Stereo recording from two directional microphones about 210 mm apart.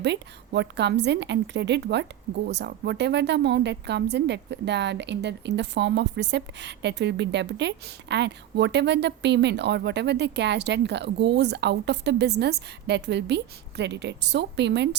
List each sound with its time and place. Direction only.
0.0 s a woman's voice: 55° right (ahead or behind)